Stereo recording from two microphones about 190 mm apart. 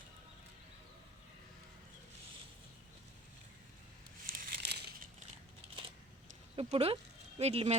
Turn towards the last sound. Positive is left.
turn(degrees=-35)  # may be behind; listen again after turning